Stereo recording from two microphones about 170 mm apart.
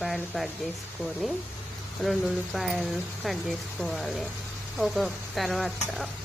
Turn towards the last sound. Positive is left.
turn(degrees=0)  # may be behind; listen again after turning